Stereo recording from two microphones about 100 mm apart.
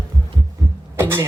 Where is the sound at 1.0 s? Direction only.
25° right (ahead or behind).